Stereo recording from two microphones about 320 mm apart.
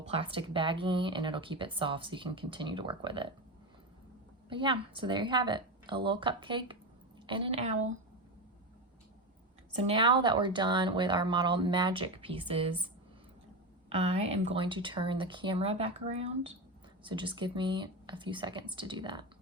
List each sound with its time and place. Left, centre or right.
0.1 s speech: centre
4.4 s speech: centre
9.7 s speech: centre
13.9 s speech: centre